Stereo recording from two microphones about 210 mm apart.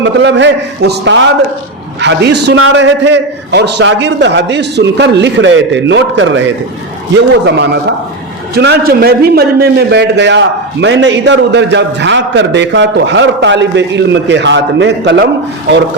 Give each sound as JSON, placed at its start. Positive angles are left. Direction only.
{"t": 0.0, "sound": "a man's voice", "side_deg": -60}